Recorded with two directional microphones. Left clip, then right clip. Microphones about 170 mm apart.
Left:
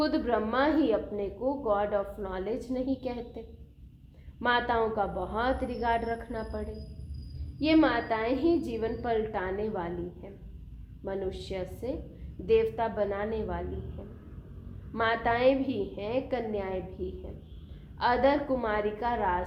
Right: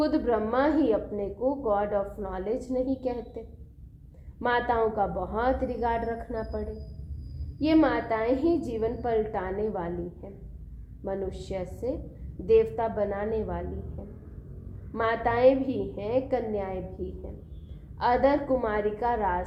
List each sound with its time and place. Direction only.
0.0 s a woman's voice: 40° right (ahead or behind)
11.0 s a woman's voice: 35° right (ahead or behind)
14.9 s a woman's voice: 40° right (ahead or behind)
18.0 s a woman's voice: 40° right (ahead or behind)